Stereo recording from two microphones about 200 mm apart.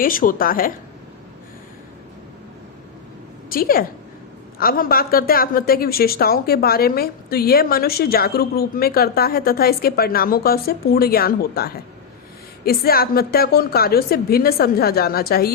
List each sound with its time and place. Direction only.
0.0 s a woman's voice: 45° left (ahead or behind)
3.5 s a woman's voice: 45° left (ahead or behind)